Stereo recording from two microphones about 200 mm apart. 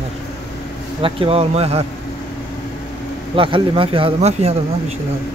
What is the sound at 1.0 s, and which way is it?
Speech, 30° right (ahead or behind).